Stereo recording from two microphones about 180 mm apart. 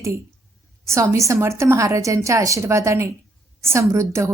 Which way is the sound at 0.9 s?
15° right (ahead or behind).